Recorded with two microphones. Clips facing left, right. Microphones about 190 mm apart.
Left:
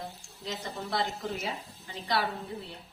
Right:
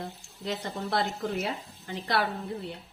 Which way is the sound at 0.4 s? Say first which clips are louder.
Right 4 dB; 65° right (ahead or behind).